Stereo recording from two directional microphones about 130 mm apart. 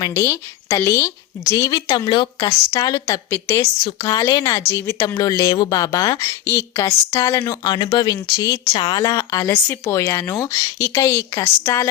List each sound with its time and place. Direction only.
0.1 s speech: 20° left (ahead or behind)
2.0 s a woman's voice: 35° left (ahead or behind)
3.1 s speech: 20° left (ahead or behind)
3.8 s speech: 35° left (ahead or behind)
6.2 s speech: 20° left (ahead or behind)
8.7 s a woman's voice: 40° left (ahead or behind)
9.5 s speech: 15° left (ahead or behind)